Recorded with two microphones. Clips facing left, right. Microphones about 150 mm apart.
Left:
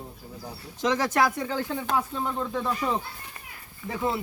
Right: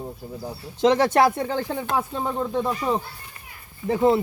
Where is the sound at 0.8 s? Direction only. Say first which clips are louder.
Right 6 dB; 30° right (ahead or behind).